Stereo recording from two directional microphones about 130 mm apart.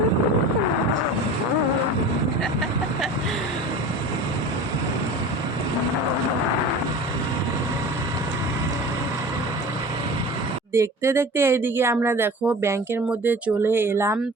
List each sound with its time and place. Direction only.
10.8 s speech: 20° right (ahead or behind)